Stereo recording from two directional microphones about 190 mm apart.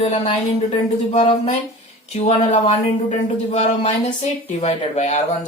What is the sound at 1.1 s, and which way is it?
A woman's voice, 30° left (ahead or behind).